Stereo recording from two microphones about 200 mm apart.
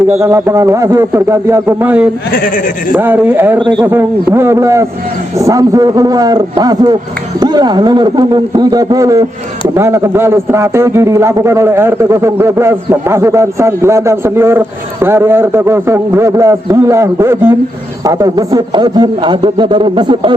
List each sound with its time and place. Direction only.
0.1 s a man's voice: 15° right (ahead or behind)
2.5 s speech: 45° left (ahead or behind)
2.9 s a man's voice: 10° right (ahead or behind)